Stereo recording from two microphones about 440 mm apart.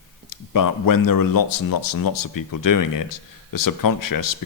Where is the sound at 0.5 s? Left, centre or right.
Left.